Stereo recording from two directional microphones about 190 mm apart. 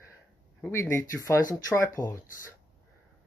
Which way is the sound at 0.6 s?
15° left (ahead or behind).